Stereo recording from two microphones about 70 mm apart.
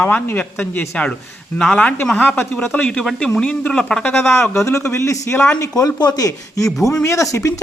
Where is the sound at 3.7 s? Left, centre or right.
Centre.